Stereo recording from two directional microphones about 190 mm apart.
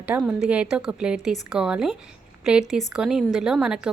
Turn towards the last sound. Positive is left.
turn(degrees=-5)  # may be behind; listen again after turning